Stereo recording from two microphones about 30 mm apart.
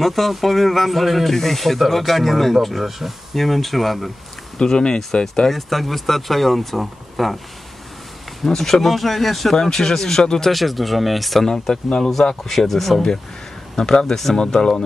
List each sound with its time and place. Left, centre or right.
0.0 s speech: centre
4.6 s speech: left
5.5 s speech: centre
8.5 s speech: centre
9.6 s speech: centre
10.5 s speech: centre
11.4 s speech: centre
12.5 s speech: centre
13.7 s speech: left